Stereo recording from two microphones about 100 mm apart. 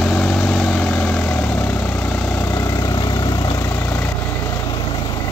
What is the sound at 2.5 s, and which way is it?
Vehicle, 35° left (ahead or behind).